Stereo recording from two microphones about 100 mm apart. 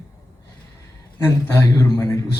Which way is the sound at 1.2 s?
25° left (ahead or behind).